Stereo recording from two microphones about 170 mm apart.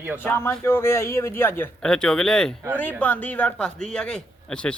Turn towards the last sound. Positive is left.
turn(degrees=5)  # may be behind; listen again after turning